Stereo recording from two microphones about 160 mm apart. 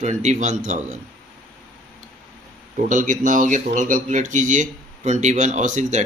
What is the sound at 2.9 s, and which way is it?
Speech, 55° right (ahead or behind).